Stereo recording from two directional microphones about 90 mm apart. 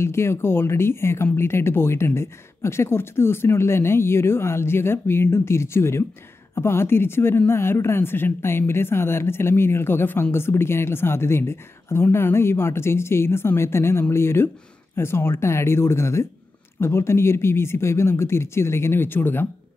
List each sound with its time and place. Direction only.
0.0 s speech: 30° left (ahead or behind)